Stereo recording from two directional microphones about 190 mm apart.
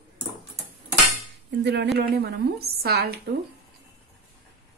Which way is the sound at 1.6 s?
65° right (ahead or behind).